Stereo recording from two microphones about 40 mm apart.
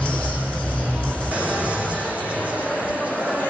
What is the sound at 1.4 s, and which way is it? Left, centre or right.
Music, right.